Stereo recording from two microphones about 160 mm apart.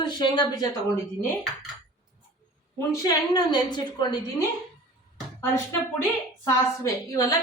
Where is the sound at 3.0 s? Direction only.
25° left (ahead or behind).